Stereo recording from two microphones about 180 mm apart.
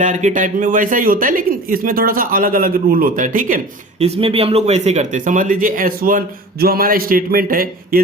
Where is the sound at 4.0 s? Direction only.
30° right (ahead or behind).